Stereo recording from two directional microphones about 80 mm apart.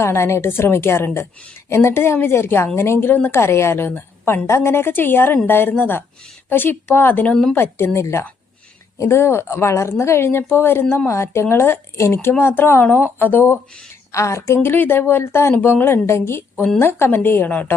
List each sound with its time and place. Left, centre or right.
0.0 s a woman's voice: left
14.1 s a woman's voice: left